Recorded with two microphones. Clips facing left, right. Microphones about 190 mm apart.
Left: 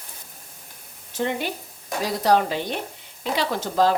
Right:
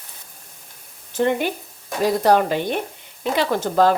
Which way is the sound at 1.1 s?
55° right (ahead or behind).